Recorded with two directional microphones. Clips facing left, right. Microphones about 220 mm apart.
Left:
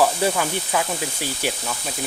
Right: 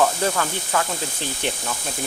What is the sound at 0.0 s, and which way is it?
Speech, 10° left (ahead or behind).